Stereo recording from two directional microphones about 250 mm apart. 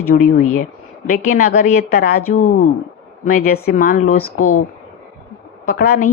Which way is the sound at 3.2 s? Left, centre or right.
Left.